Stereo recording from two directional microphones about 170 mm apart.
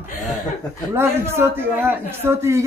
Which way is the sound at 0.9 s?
15° right (ahead or behind).